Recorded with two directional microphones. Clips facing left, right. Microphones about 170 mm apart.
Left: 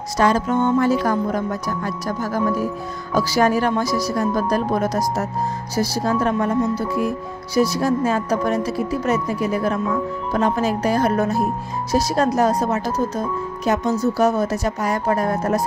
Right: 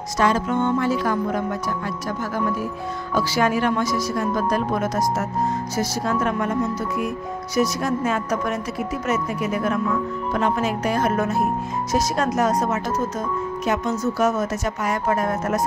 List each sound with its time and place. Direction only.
0.2 s speech: 40° left (ahead or behind)
3.2 s speech: 40° left (ahead or behind)